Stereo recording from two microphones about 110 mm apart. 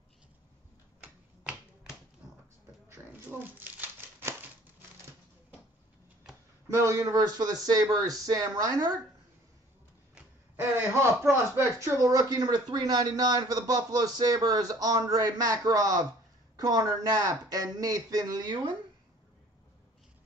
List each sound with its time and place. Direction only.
2.9 s a sound: 20° right (ahead or behind)
6.7 s speech: 25° right (ahead or behind)
10.5 s speech: 20° right (ahead or behind); by 18.8 s 40° right (ahead or behind)